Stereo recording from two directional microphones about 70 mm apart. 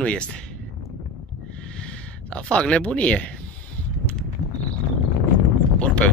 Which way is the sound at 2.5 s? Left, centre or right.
Centre.